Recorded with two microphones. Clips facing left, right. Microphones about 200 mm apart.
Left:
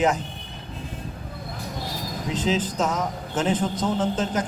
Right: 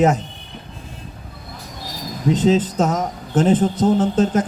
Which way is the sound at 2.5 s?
50° right (ahead or behind).